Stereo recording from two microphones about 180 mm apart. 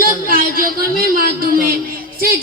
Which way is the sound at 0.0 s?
55° right (ahead or behind).